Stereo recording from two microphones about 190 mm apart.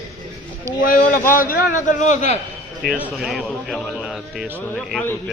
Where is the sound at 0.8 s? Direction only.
45° left (ahead or behind).